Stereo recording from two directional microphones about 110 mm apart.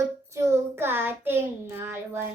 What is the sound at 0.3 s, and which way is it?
Child singing, 25° right (ahead or behind).